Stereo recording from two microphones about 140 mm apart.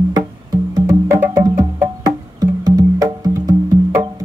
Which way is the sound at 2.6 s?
25° right (ahead or behind).